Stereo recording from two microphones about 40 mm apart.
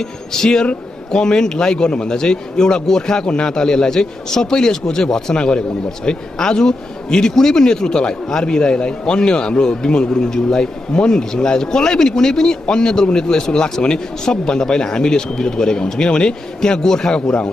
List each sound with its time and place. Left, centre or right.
0.0 s a man's voice: centre